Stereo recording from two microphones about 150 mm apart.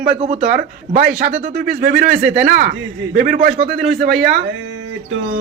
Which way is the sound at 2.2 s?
90° right.